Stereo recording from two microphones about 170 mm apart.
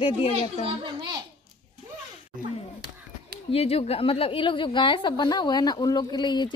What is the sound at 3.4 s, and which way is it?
A woman's voice, 35° left (ahead or behind).